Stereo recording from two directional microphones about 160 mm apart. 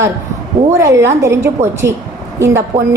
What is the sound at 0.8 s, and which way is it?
A woman's voice, 15° right (ahead or behind).